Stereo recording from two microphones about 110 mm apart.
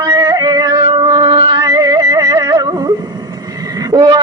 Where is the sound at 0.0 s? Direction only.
40° right (ahead or behind).